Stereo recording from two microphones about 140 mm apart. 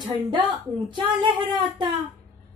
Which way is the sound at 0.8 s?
35° right (ahead or behind).